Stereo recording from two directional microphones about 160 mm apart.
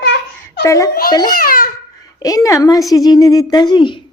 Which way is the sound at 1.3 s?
65° left (ahead or behind).